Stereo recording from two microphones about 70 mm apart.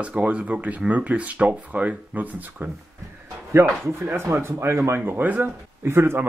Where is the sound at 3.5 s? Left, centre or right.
Right.